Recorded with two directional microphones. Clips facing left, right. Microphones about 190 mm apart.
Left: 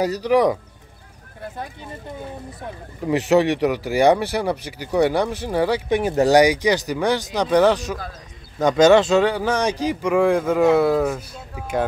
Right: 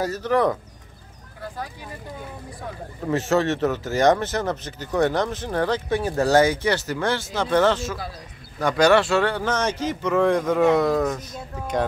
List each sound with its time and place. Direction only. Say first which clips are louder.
0.0 s speech: left 4 dB; 15° left (ahead or behind)
1.6 s speech: left 1 dB; 25° left (ahead or behind)
3.1 s speech: left 4 dB; 15° left (ahead or behind)